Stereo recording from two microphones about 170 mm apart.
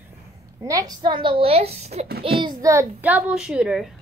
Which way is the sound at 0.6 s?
20° right (ahead or behind).